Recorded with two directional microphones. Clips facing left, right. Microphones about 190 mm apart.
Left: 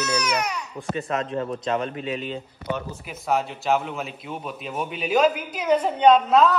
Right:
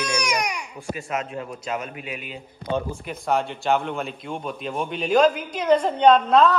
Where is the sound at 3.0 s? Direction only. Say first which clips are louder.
Right 1 dB; 5° left (ahead or behind).